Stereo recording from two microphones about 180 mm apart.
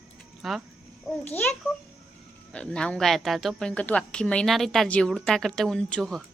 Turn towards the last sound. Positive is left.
turn(degrees=0)  # may be behind; listen again after turning